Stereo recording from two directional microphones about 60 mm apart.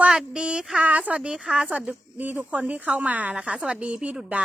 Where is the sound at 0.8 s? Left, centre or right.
Right.